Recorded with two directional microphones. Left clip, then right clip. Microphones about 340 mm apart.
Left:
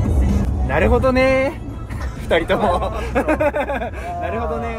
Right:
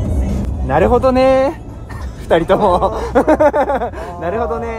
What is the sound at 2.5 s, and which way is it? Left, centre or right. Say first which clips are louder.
Speech: right 6 dB; centre.